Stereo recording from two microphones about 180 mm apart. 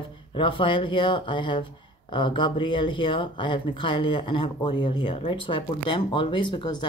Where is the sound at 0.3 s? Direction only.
30° left (ahead or behind).